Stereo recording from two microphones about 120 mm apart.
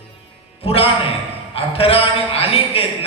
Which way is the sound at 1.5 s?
55° left (ahead or behind).